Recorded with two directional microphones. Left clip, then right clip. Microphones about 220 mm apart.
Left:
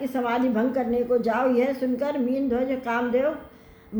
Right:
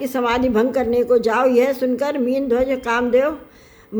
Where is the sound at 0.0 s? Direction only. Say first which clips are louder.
Right 6 dB; 50° right (ahead or behind).